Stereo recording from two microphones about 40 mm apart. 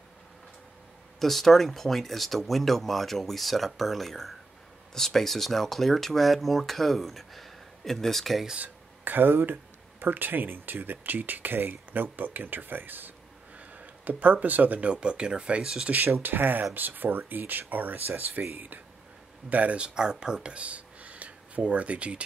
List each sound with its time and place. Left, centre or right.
1.2 s speech: centre
9.0 s speech: right
13.6 s a sound: right
14.9 s speech: right
15.9 s speech: right
19.5 s speech: right
19.8 s speech: centre
20.5 s a sound: right